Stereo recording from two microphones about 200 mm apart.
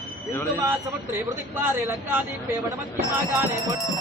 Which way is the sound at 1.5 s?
10° right (ahead or behind).